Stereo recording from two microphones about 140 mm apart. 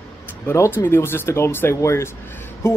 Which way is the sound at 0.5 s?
15° left (ahead or behind).